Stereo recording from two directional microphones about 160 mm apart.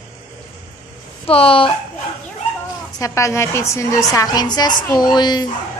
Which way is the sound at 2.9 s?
20° left (ahead or behind).